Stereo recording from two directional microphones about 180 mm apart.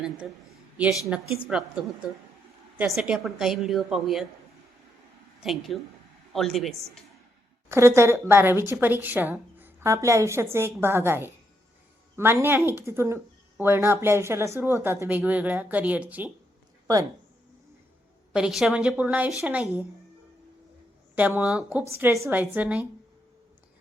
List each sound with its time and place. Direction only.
0.8 s a woman's voice: 5° right (ahead or behind)
5.4 s a woman's voice: centre (ahead or behind)
7.7 s a woman's voice: 15° right (ahead or behind)
16.8 s speech: 20° right (ahead or behind)
18.3 s a woman's voice: 5° right (ahead or behind)
21.2 s a woman's voice: 10° right (ahead or behind)